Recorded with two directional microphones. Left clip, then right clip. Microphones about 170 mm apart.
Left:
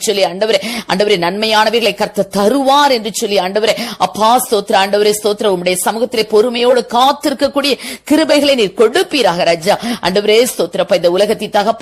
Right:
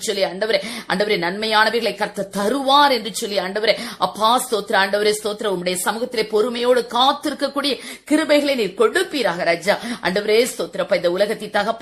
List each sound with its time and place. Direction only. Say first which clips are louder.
0.1 s a woman's voice: left 7 dB; 30° left (ahead or behind)